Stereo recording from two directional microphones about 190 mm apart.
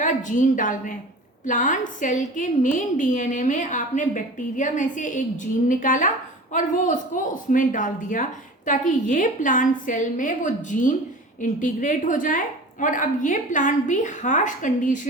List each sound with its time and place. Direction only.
0.0 s a woman's voice: 40° left (ahead or behind)